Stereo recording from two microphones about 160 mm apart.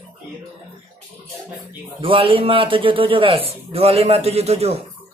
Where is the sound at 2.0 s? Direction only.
35° right (ahead or behind).